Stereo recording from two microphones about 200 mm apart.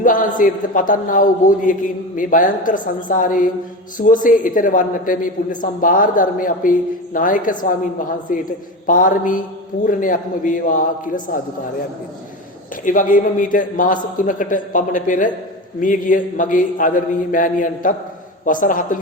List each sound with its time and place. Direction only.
0.0 s a man's voice: 40° left (ahead or behind)
12.8 s a man's voice: 40° left (ahead or behind)